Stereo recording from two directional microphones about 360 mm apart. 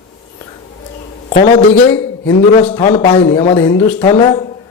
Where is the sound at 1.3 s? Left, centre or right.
Centre.